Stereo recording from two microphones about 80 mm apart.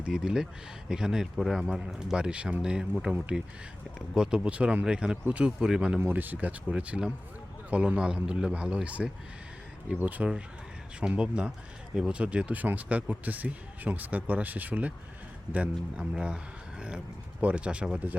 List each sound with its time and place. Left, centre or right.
0.0 s a man's voice: centre
6.0 s a man's voice: right